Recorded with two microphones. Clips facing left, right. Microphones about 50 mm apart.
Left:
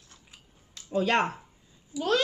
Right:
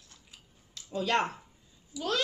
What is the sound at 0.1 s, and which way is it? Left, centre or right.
Scissors, left.